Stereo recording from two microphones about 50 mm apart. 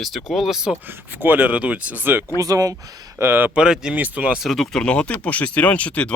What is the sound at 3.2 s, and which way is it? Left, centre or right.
Speech, right.